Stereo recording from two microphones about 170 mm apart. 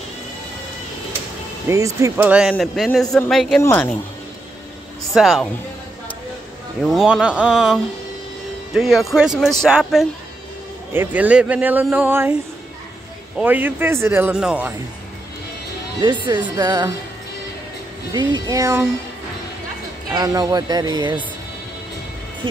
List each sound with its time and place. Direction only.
1.7 s a man's voice: 20° right (ahead or behind); by 4.0 s 10° left (ahead or behind)
5.1 s speech: centre (ahead or behind)
6.8 s a man's voice: centre (ahead or behind)
13.4 s a man's voice: 10° right (ahead or behind)
16.0 s a woman's voice: 25° right (ahead or behind)
18.1 s a woman's voice: 25° right (ahead or behind)
20.1 s a woman's voice: 20° right (ahead or behind)